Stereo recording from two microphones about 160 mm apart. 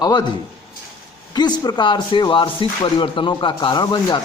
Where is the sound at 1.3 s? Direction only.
25° left (ahead or behind).